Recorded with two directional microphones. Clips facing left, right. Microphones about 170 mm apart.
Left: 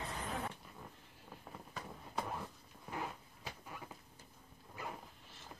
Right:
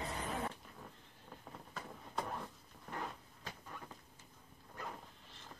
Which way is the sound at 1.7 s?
Centre (ahead or behind).